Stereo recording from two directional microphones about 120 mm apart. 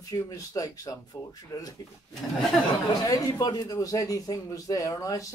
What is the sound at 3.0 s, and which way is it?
Speech, 30° left (ahead or behind).